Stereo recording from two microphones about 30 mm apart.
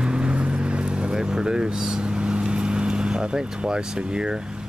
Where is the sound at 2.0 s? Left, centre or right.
Right.